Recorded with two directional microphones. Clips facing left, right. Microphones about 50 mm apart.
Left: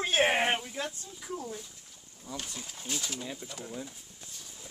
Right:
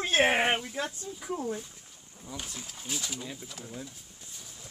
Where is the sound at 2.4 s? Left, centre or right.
Centre.